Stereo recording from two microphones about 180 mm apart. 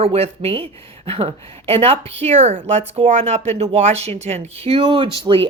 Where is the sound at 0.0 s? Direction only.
35° right (ahead or behind).